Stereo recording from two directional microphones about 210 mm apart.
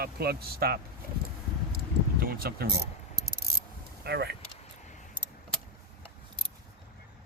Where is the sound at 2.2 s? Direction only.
45° right (ahead or behind).